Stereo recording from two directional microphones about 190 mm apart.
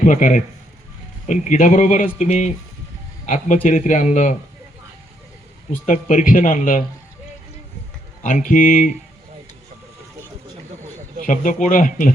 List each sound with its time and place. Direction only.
0.0 s a man's voice: 45° left (ahead or behind)
5.8 s speech: 40° left (ahead or behind)
8.2 s speech: 45° left (ahead or behind)
11.3 s speech: 45° left (ahead or behind)